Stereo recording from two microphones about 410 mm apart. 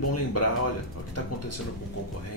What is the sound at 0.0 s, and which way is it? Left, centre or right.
Speech, left.